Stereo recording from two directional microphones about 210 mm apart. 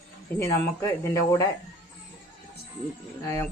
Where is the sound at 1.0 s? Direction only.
15° left (ahead or behind).